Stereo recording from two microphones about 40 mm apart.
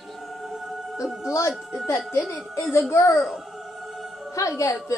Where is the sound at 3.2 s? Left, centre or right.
Centre.